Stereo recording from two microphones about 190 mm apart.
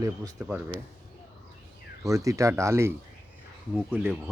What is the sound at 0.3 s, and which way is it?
Speech, 5° right (ahead or behind).